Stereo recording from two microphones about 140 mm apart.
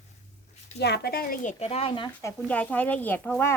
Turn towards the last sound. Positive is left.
turn(degrees=15)  # may be behind; listen again after turning